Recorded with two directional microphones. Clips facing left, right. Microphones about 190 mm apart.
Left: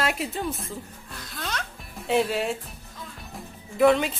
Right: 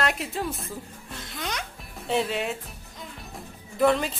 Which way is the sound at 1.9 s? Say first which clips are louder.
Left 3 dB; centre (ahead or behind).